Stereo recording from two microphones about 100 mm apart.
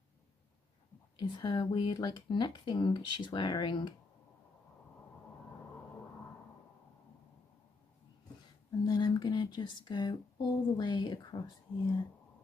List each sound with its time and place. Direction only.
1.2 s speech: 50° left (ahead or behind)
8.8 s speech: 45° left (ahead or behind)